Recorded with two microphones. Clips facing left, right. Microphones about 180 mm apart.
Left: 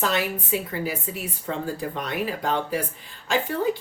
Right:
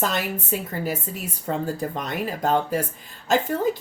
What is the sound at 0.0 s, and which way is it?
Speech, 45° right (ahead or behind).